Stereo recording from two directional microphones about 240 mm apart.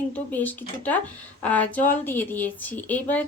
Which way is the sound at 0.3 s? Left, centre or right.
Centre.